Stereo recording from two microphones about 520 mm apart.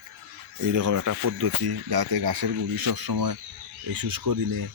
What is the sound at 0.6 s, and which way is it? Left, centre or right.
Speech, right.